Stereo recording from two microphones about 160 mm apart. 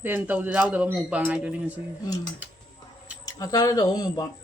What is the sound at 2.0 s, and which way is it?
Speech, 20° left (ahead or behind).